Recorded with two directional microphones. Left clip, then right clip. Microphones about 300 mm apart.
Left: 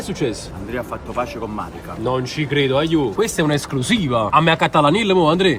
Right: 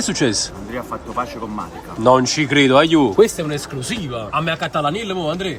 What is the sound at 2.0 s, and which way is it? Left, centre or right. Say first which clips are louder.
A woman's voice: right 8 dB; right.